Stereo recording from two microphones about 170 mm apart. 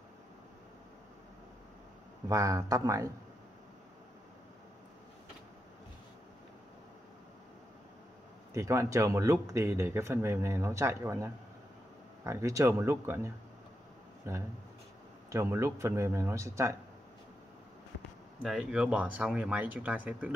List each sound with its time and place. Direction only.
2.2 s speech: 20° right (ahead or behind)
8.5 s speech: 20° right (ahead or behind)
18.4 s speech: 5° right (ahead or behind)